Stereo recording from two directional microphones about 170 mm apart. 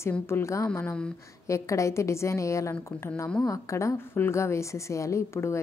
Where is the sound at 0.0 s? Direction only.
15° left (ahead or behind).